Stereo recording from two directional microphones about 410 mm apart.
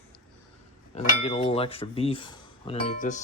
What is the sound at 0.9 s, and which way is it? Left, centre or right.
Speech, centre.